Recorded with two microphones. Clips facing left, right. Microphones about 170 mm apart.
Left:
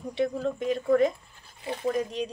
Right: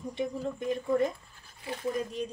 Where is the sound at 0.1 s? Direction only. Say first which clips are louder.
Left 6 dB; 80° left.